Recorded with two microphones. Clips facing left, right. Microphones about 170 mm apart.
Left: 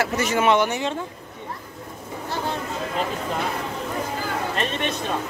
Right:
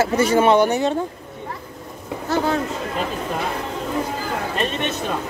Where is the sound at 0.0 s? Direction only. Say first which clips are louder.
Right 5 dB; 30° right (ahead or behind).